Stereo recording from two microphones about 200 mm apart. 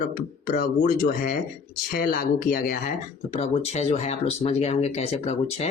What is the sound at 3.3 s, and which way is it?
Speech, 35° left (ahead or behind).